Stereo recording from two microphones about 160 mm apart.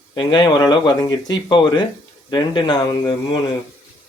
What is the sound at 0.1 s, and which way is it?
Speech, 30° left (ahead or behind).